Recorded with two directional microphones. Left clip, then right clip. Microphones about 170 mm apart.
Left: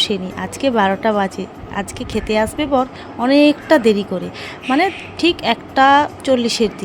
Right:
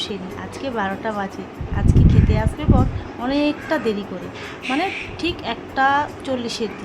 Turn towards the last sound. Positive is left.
turn(degrees=40)  # may be behind; listen again after turning